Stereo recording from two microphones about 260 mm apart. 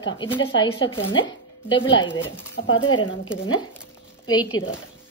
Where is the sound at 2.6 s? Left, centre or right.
Left.